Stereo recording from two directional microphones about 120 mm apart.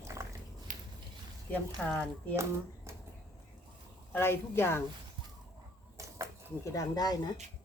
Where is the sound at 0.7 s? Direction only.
90° right.